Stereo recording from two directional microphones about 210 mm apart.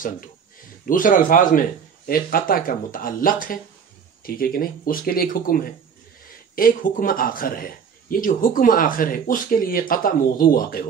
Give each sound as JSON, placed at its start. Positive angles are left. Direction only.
{"t": 0.8, "sound": "speech", "side_deg": 40}